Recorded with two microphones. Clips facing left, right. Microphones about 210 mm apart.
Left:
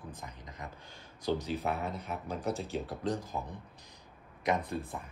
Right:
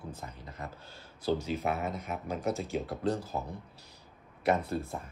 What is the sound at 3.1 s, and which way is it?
Speech, 15° left (ahead or behind).